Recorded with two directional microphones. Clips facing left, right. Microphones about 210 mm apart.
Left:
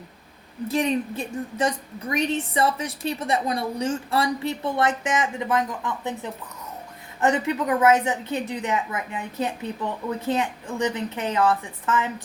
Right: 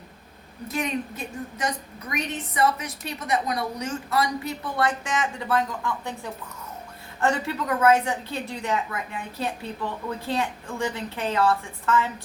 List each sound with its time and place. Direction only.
0.7 s a woman's voice: 30° left (ahead or behind)
7.2 s a woman's voice: 20° left (ahead or behind)